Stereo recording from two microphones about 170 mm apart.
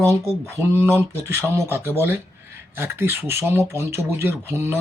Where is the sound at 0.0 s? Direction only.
15° right (ahead or behind).